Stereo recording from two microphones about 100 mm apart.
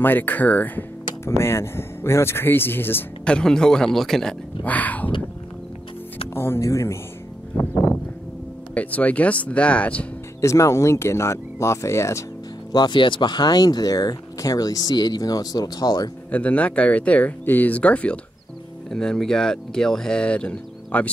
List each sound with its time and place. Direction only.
0.0 s speech: 20° left (ahead or behind)
1.4 s speech: 25° left (ahead or behind)
3.3 s speech: 10° left (ahead or behind)
4.6 s speech: 15° left (ahead or behind)
6.3 s speech: 25° left (ahead or behind)
7.7 s a sound: 25° left (ahead or behind)
8.7 s speech: 15° left (ahead or behind)
10.4 s speech: 30° left (ahead or behind)
12.7 s speech: 50° left (ahead or behind)
16.3 s speech: 15° left (ahead or behind)